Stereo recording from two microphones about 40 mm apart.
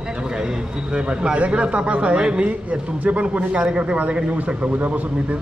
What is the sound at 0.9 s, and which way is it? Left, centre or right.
A man's voice, right.